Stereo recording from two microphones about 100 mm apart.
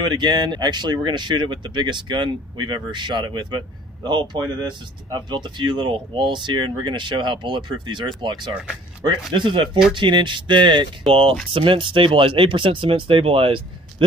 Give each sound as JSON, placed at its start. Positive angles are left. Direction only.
{"t": 0.0, "sound": "speech", "side_deg": -50}